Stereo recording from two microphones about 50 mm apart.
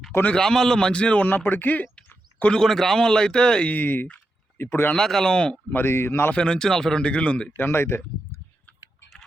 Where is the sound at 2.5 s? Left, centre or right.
Centre.